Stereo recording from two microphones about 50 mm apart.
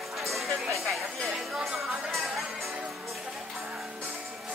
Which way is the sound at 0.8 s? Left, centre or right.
Centre.